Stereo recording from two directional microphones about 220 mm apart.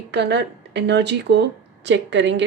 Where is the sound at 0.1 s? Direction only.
50° right (ahead or behind).